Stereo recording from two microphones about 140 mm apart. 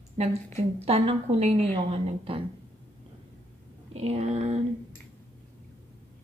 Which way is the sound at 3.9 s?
50° right (ahead or behind).